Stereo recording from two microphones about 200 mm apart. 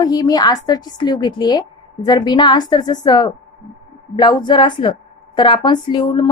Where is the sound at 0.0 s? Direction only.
20° left (ahead or behind).